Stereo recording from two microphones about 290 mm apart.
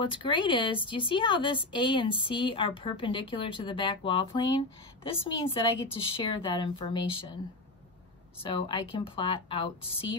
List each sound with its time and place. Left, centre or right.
0.0 s speech: centre
8.4 s speech: centre